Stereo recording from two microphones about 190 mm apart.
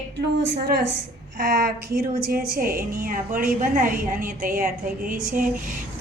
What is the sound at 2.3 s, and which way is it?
A woman's voice, 50° right (ahead or behind).